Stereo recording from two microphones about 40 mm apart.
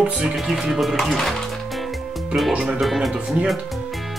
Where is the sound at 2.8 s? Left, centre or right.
Centre.